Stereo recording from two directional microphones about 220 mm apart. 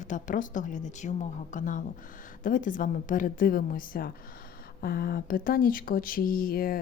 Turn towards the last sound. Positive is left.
turn(degrees=40)  # may be behind; listen again after turning